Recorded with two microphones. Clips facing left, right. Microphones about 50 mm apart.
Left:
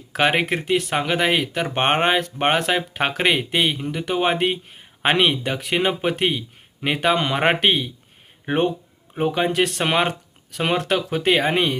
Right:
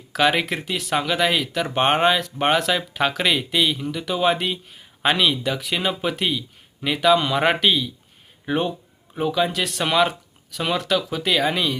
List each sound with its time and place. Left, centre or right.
0.1 s speech: left